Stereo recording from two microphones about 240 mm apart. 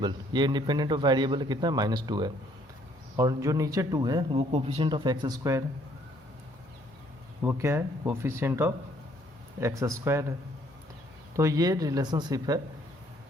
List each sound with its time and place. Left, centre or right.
0.0 s speech: centre
7.4 s speech: centre
11.3 s speech: centre